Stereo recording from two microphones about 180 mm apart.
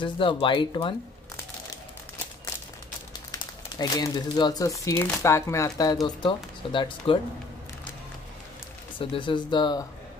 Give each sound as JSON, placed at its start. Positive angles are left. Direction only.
{"t": 0.0, "sound": "speech", "side_deg": 30}
{"t": 3.3, "sound": "speech", "side_deg": 20}
{"t": 8.9, "sound": "speech", "side_deg": 25}